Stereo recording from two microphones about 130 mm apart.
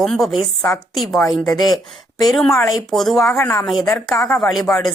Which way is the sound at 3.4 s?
20° left (ahead or behind).